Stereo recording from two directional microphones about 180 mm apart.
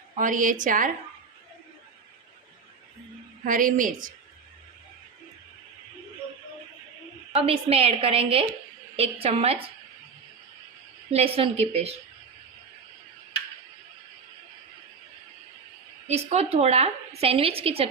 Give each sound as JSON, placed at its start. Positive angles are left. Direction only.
{"t": 0.2, "sound": "a woman's voice", "side_deg": -45}
{"t": 3.4, "sound": "a woman's voice", "side_deg": -50}
{"t": 7.4, "sound": "a woman's voice", "side_deg": -35}
{"t": 11.1, "sound": "a woman's voice", "side_deg": -35}
{"t": 16.0, "sound": "a woman's voice", "side_deg": -35}